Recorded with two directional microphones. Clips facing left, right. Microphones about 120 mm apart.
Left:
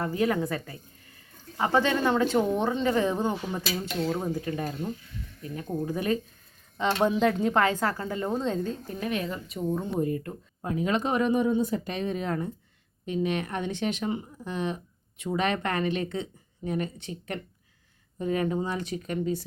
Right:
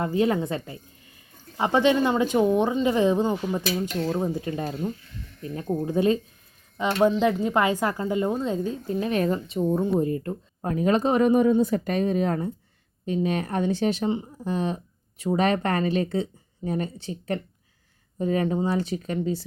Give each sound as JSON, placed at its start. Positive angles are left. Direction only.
{"t": 0.0, "sound": "speech", "side_deg": -20}
{"t": 4.2, "sound": "speech", "side_deg": -15}
{"t": 6.7, "sound": "speech", "side_deg": -5}
{"t": 8.9, "sound": "speech", "side_deg": -25}
{"t": 9.1, "sound": "speech", "side_deg": -40}
{"t": 9.5, "sound": "speech", "side_deg": -25}
{"t": 10.6, "sound": "speech", "side_deg": -40}
{"t": 11.4, "sound": "speech", "side_deg": -65}
{"t": 11.9, "sound": "speech", "side_deg": -40}